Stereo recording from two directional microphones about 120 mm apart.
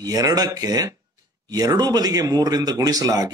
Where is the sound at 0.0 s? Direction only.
30° right (ahead or behind).